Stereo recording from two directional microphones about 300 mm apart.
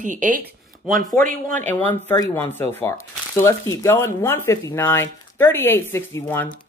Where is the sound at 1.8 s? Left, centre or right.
Centre.